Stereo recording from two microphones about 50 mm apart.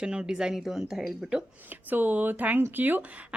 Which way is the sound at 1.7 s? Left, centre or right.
Right.